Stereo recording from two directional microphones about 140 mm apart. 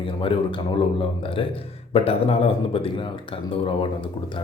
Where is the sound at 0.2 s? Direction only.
40° left (ahead or behind).